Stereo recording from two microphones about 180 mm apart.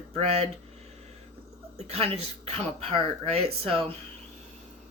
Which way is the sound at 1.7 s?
35° right (ahead or behind).